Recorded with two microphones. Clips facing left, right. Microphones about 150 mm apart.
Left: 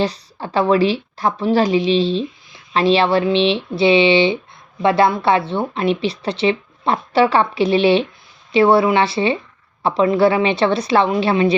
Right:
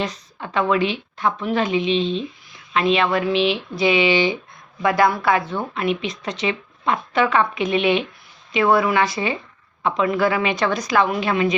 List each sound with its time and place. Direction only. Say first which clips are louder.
0.0 s a woman's voice: left 6 dB; 35° left (ahead or behind)